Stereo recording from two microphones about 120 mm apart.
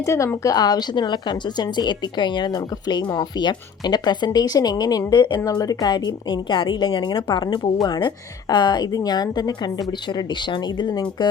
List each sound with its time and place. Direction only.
0.0 s speech: 25° left (ahead or behind); by 11.3 s 40° left (ahead or behind)